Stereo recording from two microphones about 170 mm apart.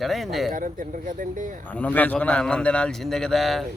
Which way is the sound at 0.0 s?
Centre (ahead or behind).